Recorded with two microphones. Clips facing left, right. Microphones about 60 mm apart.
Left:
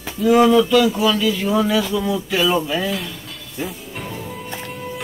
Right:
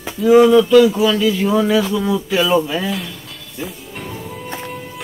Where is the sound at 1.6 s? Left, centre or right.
Centre.